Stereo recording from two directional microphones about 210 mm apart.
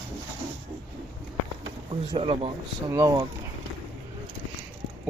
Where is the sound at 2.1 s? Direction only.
25° right (ahead or behind).